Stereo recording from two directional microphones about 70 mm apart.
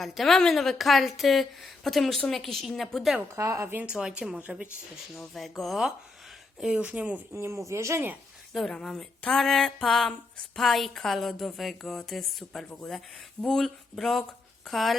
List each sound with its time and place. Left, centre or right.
0.0 s a woman's voice: centre
3.3 s speech: right
3.8 s speech: centre
5.3 s a woman's voice: centre
7.3 s speech: right
8.5 s a woman's voice: centre